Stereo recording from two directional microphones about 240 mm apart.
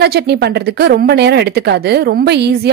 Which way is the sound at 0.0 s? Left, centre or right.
Right.